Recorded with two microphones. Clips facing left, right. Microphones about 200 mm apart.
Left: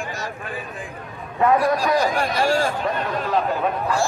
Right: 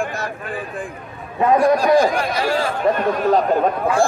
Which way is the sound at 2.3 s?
45° left (ahead or behind).